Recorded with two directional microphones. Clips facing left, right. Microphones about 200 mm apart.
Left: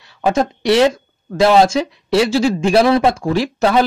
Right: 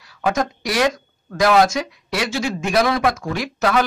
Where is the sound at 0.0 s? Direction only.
25° left (ahead or behind).